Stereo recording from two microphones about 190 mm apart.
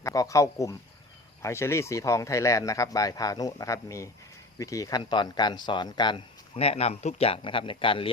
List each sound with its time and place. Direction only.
0.0 s speech: 15° left (ahead or behind)